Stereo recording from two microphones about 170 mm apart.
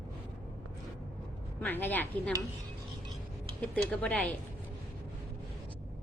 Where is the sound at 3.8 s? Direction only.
5° left (ahead or behind).